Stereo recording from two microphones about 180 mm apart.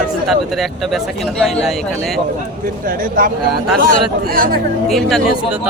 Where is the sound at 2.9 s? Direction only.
50° right (ahead or behind).